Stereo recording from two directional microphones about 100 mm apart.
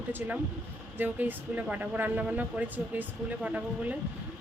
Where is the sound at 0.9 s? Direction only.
20° right (ahead or behind).